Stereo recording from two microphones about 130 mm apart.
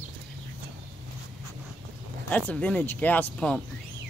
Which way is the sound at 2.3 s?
10° left (ahead or behind).